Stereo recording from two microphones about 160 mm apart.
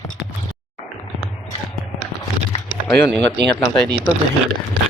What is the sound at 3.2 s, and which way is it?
Speech, 90° right.